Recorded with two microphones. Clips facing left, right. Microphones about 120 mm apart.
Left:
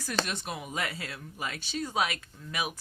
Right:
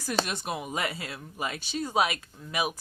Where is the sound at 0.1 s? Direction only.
10° right (ahead or behind).